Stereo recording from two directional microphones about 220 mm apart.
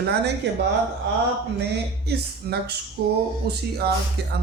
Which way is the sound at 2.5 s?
45° right (ahead or behind).